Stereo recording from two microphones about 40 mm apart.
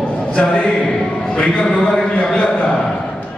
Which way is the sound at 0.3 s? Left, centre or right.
Left.